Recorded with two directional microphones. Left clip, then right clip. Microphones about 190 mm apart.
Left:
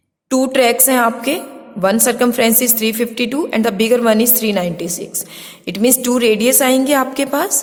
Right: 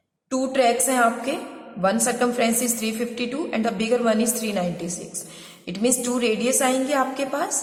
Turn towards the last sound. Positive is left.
turn(degrees=50)  # may be behind; listen again after turning